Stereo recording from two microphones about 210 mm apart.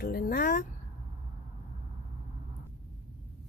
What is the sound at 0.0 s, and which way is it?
Speech, 45° left (ahead or behind).